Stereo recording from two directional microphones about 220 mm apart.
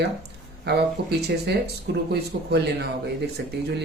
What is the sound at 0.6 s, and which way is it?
Speech, 50° right (ahead or behind).